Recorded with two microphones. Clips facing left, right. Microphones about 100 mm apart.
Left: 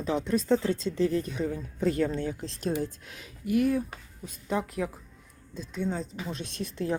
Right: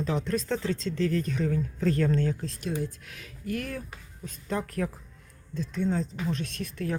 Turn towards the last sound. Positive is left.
turn(degrees=25)  # may be behind; listen again after turning